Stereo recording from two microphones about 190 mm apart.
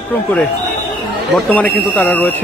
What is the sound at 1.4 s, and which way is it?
Speech, 10° left (ahead or behind).